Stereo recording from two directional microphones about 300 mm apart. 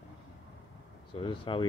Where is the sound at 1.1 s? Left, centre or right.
Centre.